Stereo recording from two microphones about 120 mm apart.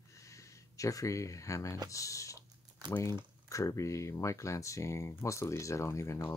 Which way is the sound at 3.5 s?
25° left (ahead or behind).